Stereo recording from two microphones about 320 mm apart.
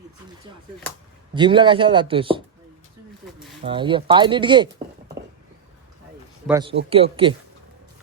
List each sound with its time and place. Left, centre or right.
1.3 s speech: centre
3.6 s speech: centre
6.5 s speech: centre